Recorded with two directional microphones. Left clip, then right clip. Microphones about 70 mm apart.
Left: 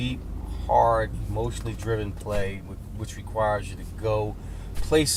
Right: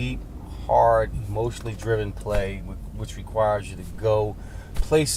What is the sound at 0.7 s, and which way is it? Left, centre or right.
Speech, right.